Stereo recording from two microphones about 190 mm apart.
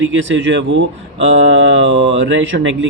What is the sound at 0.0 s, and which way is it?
Speech, 80° right.